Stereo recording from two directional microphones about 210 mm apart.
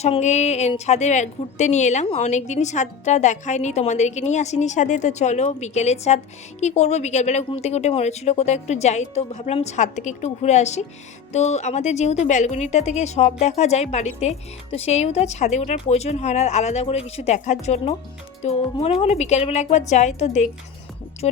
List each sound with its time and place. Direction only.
0.0 s speech: 30° left (ahead or behind)